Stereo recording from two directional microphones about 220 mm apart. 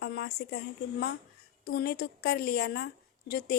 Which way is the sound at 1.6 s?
45° left (ahead or behind).